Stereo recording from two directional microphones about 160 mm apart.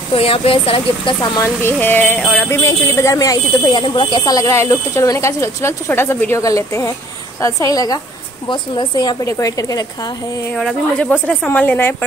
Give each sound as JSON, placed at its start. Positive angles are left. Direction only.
{"t": 0.1, "sound": "speech", "side_deg": 35}
{"t": 10.5, "sound": "speech", "side_deg": 10}